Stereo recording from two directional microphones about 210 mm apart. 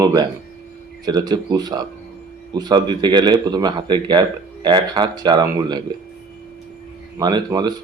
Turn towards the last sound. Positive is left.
turn(degrees=-20)  # may be behind; listen again after turning